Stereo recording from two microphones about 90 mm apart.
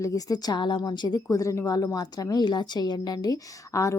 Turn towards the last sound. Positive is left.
turn(degrees=35)  # may be behind; listen again after turning